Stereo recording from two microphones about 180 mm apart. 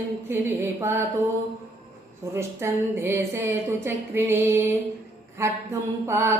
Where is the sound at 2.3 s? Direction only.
15° right (ahead or behind).